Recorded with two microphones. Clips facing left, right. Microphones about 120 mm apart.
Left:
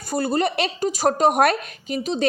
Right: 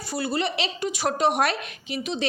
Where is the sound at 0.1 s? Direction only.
45° left (ahead or behind).